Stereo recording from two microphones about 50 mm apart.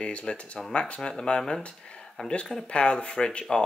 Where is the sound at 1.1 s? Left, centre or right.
Centre.